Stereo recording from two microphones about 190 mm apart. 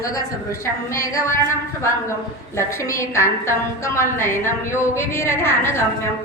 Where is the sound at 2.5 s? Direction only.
15° left (ahead or behind).